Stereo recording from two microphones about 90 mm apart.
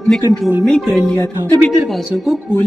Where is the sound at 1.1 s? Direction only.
20° left (ahead or behind).